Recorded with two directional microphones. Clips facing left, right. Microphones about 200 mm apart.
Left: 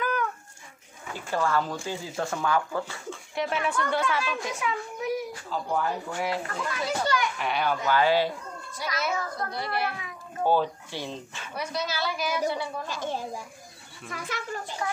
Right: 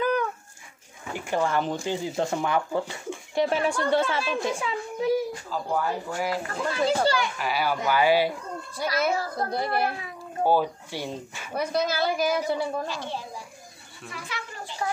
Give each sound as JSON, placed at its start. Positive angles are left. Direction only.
{"t": 1.1, "sound": "speech", "side_deg": -15}
{"t": 3.3, "sound": "speech", "side_deg": -30}
{"t": 5.5, "sound": "speech", "side_deg": -5}
{"t": 6.5, "sound": "speech", "side_deg": -35}
{"t": 7.3, "sound": "speech", "side_deg": -5}
{"t": 9.1, "sound": "a sound", "side_deg": -35}
{"t": 9.5, "sound": "a woman's voice", "side_deg": -50}
{"t": 10.4, "sound": "speech", "side_deg": -10}
{"t": 11.5, "sound": "a woman's voice", "side_deg": -55}
{"t": 12.8, "sound": "a child's voice", "side_deg": 45}